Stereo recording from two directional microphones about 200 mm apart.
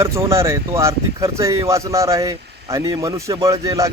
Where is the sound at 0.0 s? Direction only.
15° right (ahead or behind).